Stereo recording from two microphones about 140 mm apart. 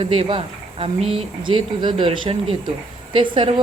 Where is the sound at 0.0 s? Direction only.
35° right (ahead or behind).